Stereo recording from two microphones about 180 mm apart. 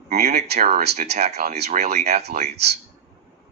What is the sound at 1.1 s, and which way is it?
Speech, 65° right (ahead or behind).